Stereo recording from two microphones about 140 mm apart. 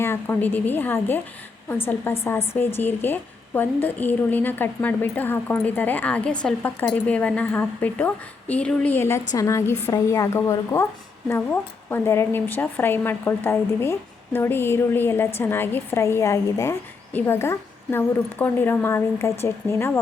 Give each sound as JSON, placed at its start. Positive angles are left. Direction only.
{"t": 0.0, "sound": "a woman's voice", "side_deg": 15}